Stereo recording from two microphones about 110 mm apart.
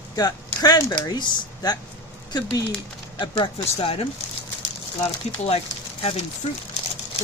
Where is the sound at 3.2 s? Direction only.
45° left (ahead or behind).